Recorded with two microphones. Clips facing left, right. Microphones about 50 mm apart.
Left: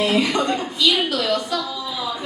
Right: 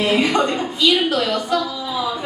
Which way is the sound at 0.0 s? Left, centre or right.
Right.